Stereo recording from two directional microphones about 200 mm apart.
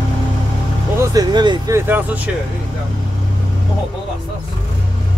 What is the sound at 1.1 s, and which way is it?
Vehicle, 20° right (ahead or behind).